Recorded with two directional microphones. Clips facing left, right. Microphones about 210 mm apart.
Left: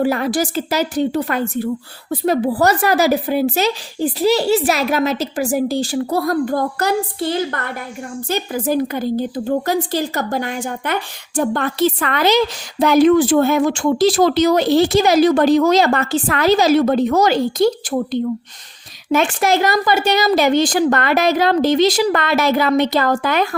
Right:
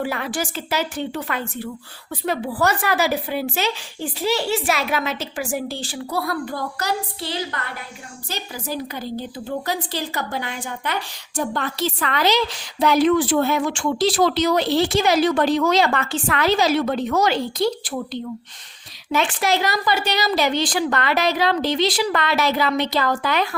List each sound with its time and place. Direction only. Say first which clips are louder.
0.0 s speech: left 8 dB; 40° left (ahead or behind)